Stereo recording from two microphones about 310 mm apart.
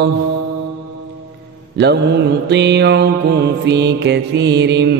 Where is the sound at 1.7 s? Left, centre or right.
Right.